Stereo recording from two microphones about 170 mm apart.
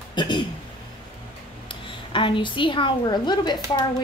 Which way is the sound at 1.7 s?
30° left (ahead or behind).